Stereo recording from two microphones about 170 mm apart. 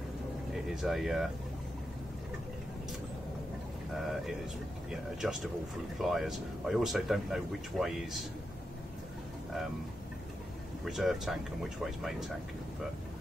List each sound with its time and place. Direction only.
0.5 s speech: centre (ahead or behind)
3.9 s speech: centre (ahead or behind)
5.2 s speech: 5° right (ahead or behind)
10.9 s speech: centre (ahead or behind)